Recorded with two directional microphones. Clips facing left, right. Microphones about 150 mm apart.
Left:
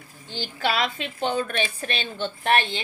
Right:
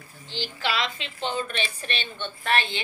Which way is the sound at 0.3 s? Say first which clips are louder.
Left 3 dB; 50° left (ahead or behind).